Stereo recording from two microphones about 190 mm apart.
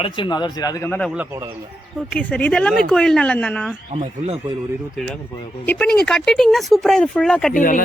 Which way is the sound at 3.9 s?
35° right (ahead or behind).